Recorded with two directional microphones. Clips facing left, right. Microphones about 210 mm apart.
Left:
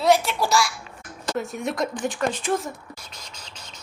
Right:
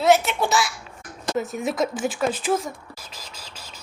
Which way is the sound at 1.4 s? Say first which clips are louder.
Right 2 dB; centre (ahead or behind).